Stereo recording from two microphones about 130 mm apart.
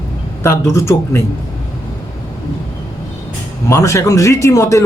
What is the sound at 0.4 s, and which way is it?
Speech, 20° left (ahead or behind).